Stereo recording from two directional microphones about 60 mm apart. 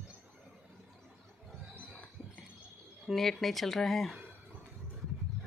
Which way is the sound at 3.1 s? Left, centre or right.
Centre.